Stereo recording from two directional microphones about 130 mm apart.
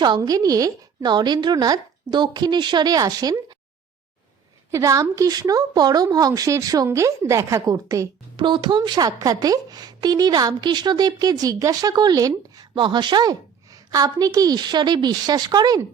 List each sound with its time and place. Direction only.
0.0 s speech: 30° right (ahead or behind)
4.7 s a woman's voice: 25° right (ahead or behind)
8.4 s speech: 40° right (ahead or behind)